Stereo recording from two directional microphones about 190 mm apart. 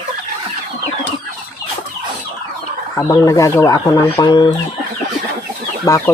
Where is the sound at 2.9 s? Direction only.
15° left (ahead or behind).